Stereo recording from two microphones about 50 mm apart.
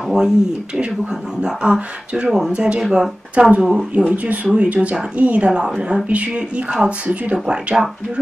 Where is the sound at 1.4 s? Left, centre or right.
Centre.